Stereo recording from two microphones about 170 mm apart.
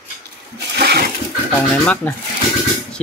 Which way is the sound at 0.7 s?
65° right (ahead or behind).